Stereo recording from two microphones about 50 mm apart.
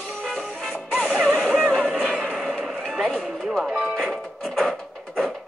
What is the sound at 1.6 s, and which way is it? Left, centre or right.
Music, centre.